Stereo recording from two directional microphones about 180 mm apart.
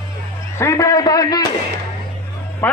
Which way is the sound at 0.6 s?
15° left (ahead or behind).